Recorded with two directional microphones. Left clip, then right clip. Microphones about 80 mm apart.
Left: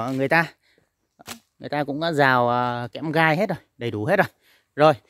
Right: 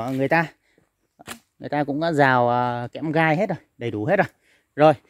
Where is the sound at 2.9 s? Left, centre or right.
Left.